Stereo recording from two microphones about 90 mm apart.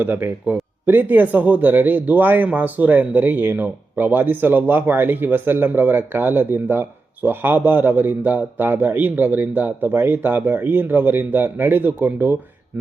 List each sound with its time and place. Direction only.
0.0 s speech: 20° right (ahead or behind)